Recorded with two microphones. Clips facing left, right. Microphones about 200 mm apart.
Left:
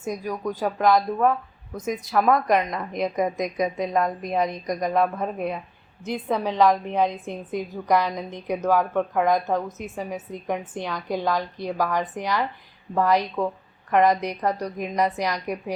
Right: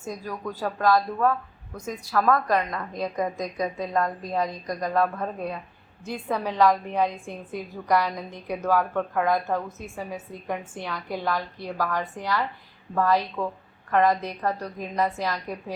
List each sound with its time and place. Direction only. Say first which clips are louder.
0.0 s a woman's voice: left 5 dB; 15° left (ahead or behind)